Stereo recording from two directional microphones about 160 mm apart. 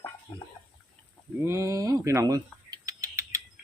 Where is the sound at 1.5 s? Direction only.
15° right (ahead or behind).